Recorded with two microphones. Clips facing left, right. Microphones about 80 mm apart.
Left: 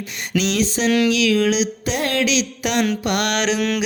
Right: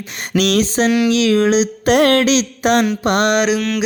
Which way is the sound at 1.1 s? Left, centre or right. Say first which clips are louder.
Right 4 dB; right.